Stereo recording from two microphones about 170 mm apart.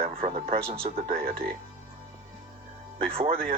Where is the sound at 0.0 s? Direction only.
35° right (ahead or behind).